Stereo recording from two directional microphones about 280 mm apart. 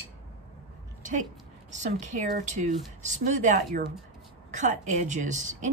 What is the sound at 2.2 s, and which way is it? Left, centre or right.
A woman's voice, right.